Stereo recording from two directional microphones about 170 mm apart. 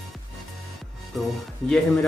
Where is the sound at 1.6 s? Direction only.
Centre (ahead or behind).